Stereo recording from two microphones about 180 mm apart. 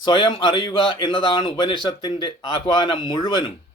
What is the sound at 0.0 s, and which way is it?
Speech, 25° left (ahead or behind).